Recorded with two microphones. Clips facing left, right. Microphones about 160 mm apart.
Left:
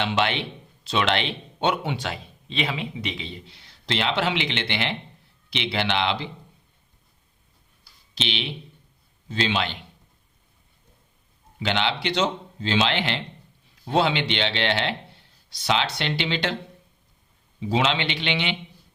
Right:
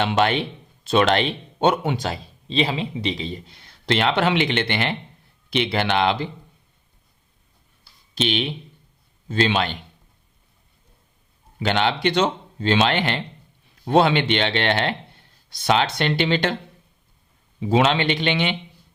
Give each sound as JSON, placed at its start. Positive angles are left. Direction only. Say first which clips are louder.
{"t": 0.0, "sound": "a man's voice", "louder": "right 4 dB", "side_deg": -45}
{"t": 8.1, "sound": "a man's voice", "louder": "right 7 dB", "side_deg": -50}
{"t": 11.6, "sound": "a man's voice", "louder": "right 5 dB", "side_deg": -45}
{"t": 17.6, "sound": "a man's voice", "louder": "right 5 dB", "side_deg": -50}